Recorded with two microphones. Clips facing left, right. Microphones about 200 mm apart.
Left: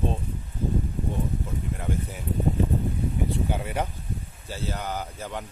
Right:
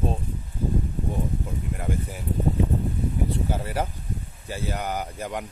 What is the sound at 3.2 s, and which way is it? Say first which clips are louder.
Speech: even; centre (ahead or behind).